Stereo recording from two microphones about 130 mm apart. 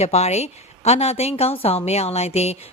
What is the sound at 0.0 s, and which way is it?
A woman's voice, 55° left (ahead or behind).